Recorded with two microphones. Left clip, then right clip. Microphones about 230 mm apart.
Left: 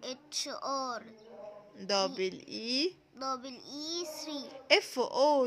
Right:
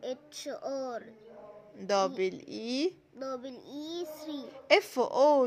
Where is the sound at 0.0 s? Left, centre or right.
Left.